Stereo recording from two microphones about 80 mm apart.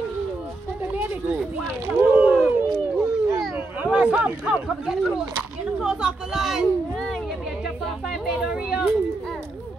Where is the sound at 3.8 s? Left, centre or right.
Centre.